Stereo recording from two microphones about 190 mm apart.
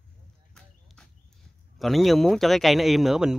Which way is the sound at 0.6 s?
5° left (ahead or behind).